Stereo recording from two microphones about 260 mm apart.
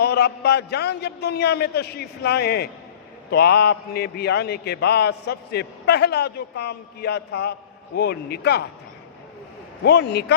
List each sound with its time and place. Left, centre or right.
0.0 s a man's voice: left
9.8 s a man's voice: left